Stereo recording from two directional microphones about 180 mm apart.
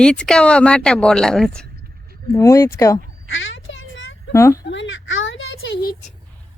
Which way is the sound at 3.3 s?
90° left.